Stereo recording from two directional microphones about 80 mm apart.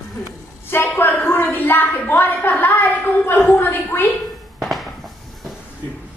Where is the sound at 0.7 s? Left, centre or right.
Left.